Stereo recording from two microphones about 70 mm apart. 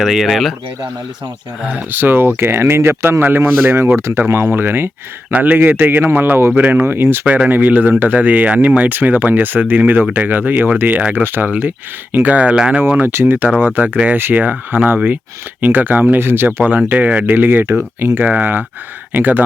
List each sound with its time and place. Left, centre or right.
0.0 s speech: centre
1.6 s speech: right
7.3 s speech: right
13.1 s speech: right
13.7 s speech: centre
16.6 s speech: right